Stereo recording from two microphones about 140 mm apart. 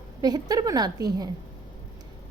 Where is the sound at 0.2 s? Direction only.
30° right (ahead or behind).